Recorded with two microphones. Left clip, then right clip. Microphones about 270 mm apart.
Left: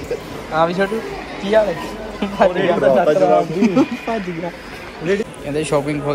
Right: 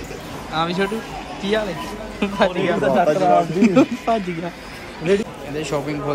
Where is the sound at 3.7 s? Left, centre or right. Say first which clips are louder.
Right 1 dB; centre.